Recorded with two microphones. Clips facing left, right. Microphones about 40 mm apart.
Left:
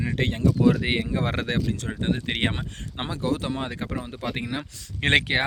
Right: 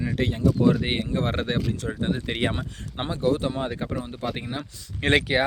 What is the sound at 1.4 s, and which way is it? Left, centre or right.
Speech, left.